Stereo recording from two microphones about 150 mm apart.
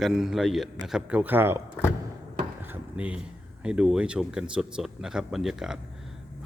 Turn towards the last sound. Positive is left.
turn(degrees=-5)  # may be behind; listen again after turning